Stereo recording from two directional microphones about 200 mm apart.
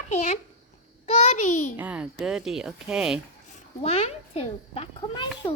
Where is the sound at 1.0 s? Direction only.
30° left (ahead or behind).